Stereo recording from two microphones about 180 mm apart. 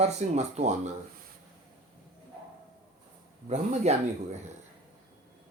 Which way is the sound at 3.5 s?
40° right (ahead or behind).